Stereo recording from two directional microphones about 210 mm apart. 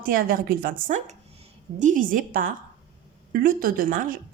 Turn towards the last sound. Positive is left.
turn(degrees=-40)  # may be behind; listen again after turning